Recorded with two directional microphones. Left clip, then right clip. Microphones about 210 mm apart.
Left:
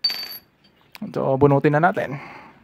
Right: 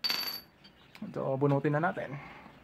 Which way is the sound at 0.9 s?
50° left (ahead or behind).